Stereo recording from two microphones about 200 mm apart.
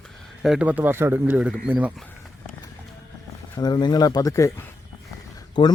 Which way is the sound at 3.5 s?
20° left (ahead or behind).